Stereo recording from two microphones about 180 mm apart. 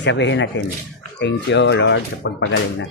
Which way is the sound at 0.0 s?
80° left.